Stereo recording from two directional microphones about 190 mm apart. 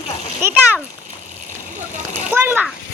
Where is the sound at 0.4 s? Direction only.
10° right (ahead or behind).